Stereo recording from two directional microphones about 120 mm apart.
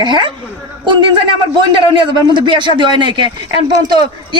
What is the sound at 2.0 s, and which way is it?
Speech, 40° right (ahead or behind).